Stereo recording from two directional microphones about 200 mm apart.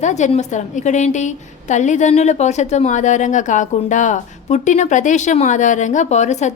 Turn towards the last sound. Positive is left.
turn(degrees=35)  # may be behind; listen again after turning